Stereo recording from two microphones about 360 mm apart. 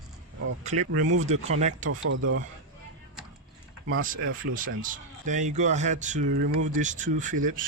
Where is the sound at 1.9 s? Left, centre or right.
Right.